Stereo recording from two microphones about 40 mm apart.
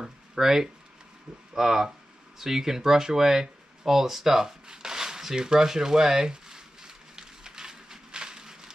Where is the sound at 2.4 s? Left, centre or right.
Centre.